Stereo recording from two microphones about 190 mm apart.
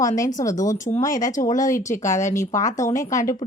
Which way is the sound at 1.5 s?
45° left (ahead or behind).